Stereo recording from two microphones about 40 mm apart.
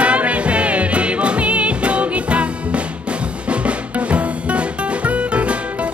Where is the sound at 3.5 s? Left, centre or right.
Right.